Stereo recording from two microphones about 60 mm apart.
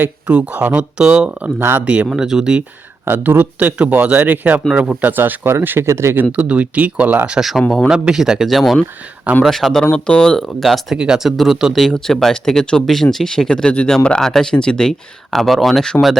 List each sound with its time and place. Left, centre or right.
0.0 s speech: right
1.5 s speech: right
1.8 s speech: right
2.0 s speech: centre
3.1 s speech: right
4.7 s speech: centre
4.9 s speech: right
5.8 s speech: right
6.3 s speech: right
7.3 s speech: centre
9.8 s speech: centre
10.9 s speech: centre
11.8 s speech: centre